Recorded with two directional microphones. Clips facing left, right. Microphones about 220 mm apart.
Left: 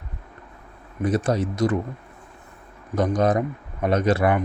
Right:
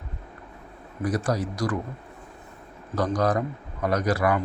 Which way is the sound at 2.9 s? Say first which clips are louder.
Left 3 dB; 20° left (ahead or behind).